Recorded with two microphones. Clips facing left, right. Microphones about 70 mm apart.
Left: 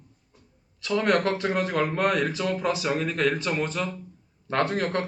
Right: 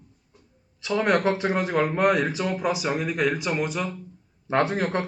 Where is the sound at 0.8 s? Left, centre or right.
Centre.